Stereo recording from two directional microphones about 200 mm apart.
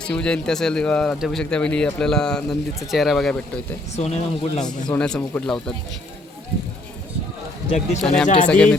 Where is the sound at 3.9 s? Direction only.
35° left (ahead or behind).